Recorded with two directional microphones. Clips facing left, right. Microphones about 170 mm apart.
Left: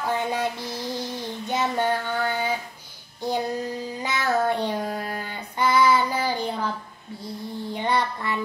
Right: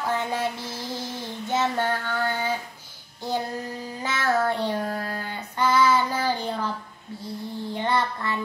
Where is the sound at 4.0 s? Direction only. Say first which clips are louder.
Even; 15° left (ahead or behind).